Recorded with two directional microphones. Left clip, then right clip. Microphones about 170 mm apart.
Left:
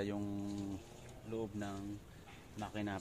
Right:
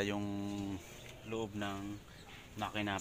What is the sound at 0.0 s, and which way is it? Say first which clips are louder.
Speech: right 4 dB; 15° right (ahead or behind).